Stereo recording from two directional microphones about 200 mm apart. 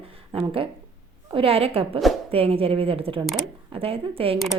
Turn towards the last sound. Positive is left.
turn(degrees=0)  # may be behind; listen again after turning